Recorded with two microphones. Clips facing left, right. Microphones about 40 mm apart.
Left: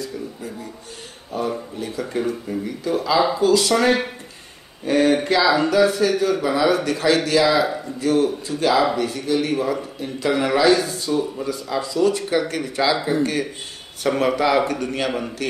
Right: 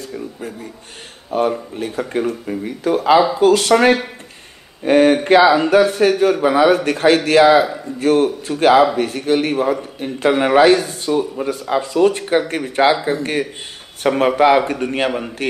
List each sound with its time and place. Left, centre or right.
1.3 s a man's voice: right
15.0 s a man's voice: right